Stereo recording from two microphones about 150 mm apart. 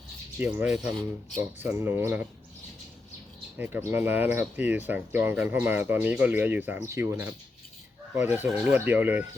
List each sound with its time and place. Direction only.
0.3 s speech: 10° right (ahead or behind)
1.4 s speech: 15° right (ahead or behind)
3.6 s speech: 15° right (ahead or behind)